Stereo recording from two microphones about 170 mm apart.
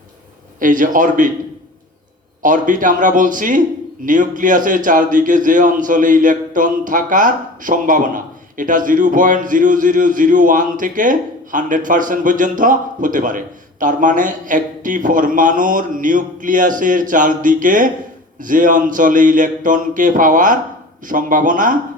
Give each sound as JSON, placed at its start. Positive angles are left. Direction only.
{"t": 0.6, "sound": "a man's voice", "side_deg": -50}
{"t": 2.4, "sound": "a man's voice", "side_deg": -50}